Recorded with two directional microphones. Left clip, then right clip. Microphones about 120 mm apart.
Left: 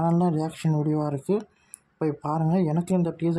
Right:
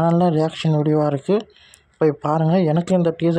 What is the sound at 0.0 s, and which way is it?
Speech, 20° right (ahead or behind).